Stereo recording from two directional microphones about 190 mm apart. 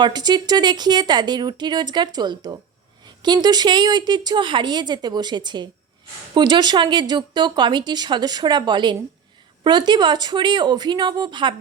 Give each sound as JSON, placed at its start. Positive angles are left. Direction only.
{"t": 0.0, "sound": "speech", "side_deg": -20}